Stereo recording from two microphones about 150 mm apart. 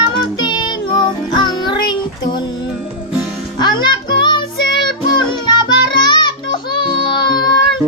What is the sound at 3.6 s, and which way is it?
Music, 30° left (ahead or behind).